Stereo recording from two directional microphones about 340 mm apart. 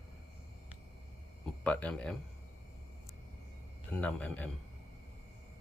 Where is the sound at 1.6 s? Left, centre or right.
Centre.